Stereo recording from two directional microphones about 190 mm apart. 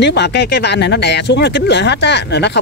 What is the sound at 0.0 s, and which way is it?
Speech, 65° left (ahead or behind).